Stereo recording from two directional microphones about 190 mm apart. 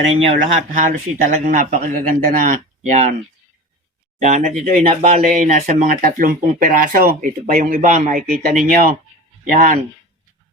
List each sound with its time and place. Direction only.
0.3 s speech: 40° right (ahead or behind)
4.2 s speech: 40° right (ahead or behind)